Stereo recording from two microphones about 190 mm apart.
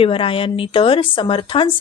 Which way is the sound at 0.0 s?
30° left (ahead or behind).